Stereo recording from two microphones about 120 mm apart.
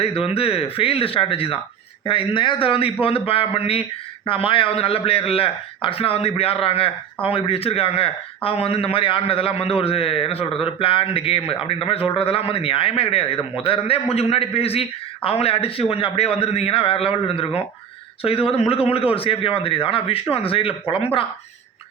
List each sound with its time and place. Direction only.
0.0 s a man's voice: 55° left (ahead or behind)